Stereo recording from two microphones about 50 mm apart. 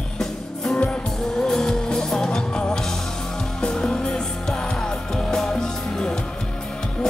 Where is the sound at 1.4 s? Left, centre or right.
Centre.